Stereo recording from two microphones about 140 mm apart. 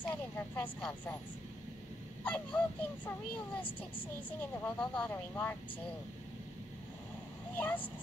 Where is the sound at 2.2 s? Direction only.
10° left (ahead or behind).